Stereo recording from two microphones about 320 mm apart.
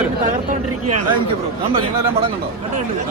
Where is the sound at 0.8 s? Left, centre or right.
Right.